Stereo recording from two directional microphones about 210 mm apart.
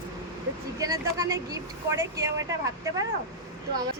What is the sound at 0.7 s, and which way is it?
Speech, 15° right (ahead or behind).